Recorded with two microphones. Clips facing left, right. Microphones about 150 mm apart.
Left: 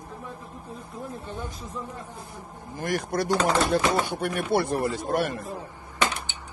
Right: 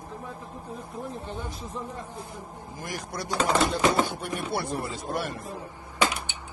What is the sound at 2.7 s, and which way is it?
Speech, 60° left (ahead or behind).